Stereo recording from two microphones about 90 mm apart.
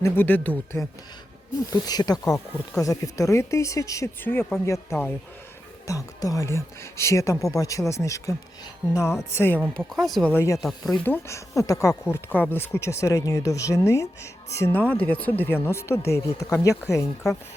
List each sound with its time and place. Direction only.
0.0 s speech: 20° left (ahead or behind)
1.7 s speech: 50° left (ahead or behind)
4.2 s speech: 25° left (ahead or behind)
9.3 s speech: 25° left (ahead or behind)
9.8 s speech: 10° left (ahead or behind)
10.3 s speech: 35° left (ahead or behind)
10.6 s speech: 5° left (ahead or behind)
11.0 s speech: 20° left (ahead or behind)
11.3 s speech: 40° left (ahead or behind)
14.9 s speech: 15° left (ahead or behind); by 17.1 s 35° left (ahead or behind)